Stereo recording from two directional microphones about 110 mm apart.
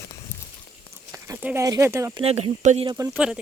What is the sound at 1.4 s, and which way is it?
Speech, 15° right (ahead or behind).